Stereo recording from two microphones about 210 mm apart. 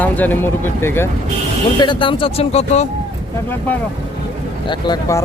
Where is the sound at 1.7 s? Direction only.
20° left (ahead or behind).